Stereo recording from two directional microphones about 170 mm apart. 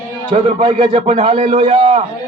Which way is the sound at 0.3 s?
35° right (ahead or behind).